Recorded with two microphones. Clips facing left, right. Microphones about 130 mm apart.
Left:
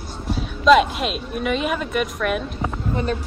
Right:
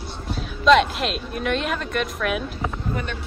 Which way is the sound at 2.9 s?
35° left (ahead or behind).